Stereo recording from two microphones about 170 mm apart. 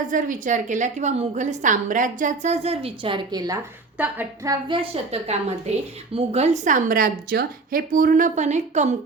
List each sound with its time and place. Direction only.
0.1 s a woman's voice: 50° right (ahead or behind); by 3.6 s 25° right (ahead or behind)
3.9 s a woman's voice: 10° right (ahead or behind)
4.7 s a woman's voice: 35° right (ahead or behind)